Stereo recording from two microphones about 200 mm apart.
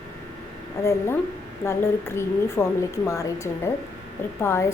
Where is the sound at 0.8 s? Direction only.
15° left (ahead or behind).